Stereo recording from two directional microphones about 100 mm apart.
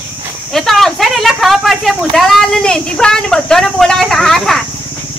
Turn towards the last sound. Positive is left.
turn(degrees=5)  # may be behind; listen again after turning